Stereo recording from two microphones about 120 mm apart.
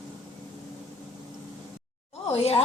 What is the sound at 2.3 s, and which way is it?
Speech, 60° left (ahead or behind).